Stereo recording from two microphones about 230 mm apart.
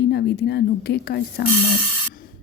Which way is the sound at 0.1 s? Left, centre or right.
Left.